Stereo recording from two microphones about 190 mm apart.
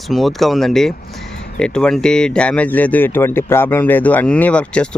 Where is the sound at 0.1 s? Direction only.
Centre (ahead or behind).